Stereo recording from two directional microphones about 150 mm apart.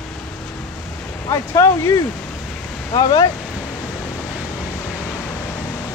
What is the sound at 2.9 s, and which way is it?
Speech, 25° left (ahead or behind).